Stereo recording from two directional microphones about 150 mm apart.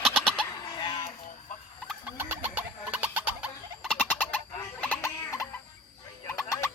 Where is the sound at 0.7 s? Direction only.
30° left (ahead or behind).